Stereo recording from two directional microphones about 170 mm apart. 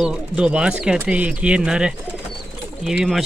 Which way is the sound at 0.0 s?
5° right (ahead or behind).